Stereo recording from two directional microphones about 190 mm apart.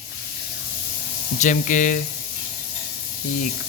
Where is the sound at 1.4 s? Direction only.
45° left (ahead or behind).